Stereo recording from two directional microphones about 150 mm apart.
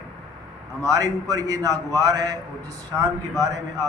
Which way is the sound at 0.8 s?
25° right (ahead or behind).